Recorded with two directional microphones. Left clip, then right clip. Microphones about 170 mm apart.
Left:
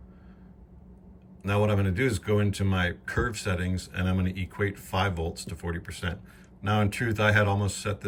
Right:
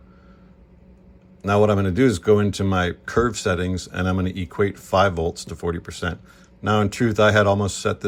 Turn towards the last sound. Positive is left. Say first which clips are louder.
# right 9 dB
turn(degrees=-25)  # may be behind; listen again after turning